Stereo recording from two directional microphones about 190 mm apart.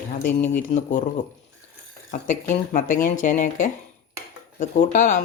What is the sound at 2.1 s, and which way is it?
Speech, 40° left (ahead or behind).